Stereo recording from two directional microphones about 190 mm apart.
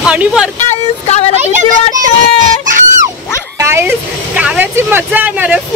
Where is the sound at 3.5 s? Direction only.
15° right (ahead or behind).